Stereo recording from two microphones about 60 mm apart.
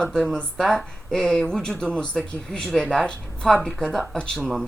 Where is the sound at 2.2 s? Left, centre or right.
Centre.